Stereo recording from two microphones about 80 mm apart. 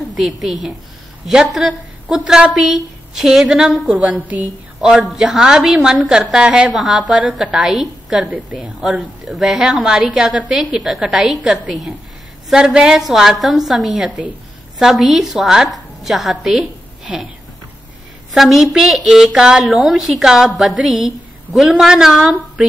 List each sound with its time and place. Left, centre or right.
0.2 s a woman's voice: centre
3.7 s a woman's voice: centre
4.7 s a woman's voice: centre
8.3 s a woman's voice: centre
9.2 s a woman's voice: centre
18.3 s a woman's voice: centre